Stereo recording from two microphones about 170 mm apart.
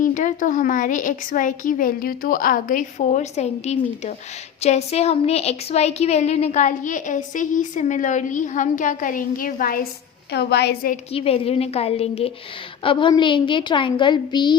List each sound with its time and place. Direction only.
0.0 s speech: 50° left (ahead or behind)
10.3 s a woman's voice: 75° left (ahead or behind)
11.1 s a woman's voice: 35° left (ahead or behind)